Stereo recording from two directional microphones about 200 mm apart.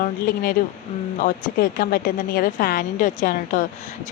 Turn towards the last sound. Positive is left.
turn(degrees=40)  # may be behind; listen again after turning